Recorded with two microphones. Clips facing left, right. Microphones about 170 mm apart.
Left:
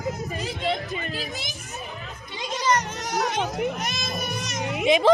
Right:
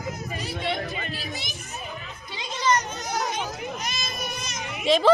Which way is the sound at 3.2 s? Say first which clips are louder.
Left 4 dB; 70° left (ahead or behind).